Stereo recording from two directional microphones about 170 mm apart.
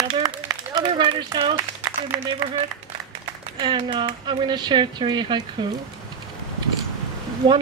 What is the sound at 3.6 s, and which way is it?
Speech, 25° right (ahead or behind).